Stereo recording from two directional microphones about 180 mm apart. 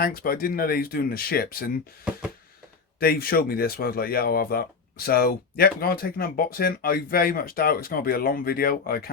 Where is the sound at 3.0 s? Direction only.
55° left (ahead or behind).